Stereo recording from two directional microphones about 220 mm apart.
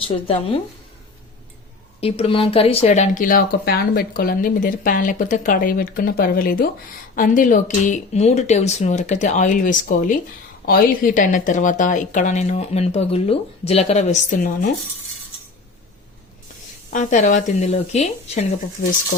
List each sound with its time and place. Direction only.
0.0 s speech: 25° left (ahead or behind)
2.0 s speech: 25° left (ahead or behind)
16.9 s speech: 35° left (ahead or behind)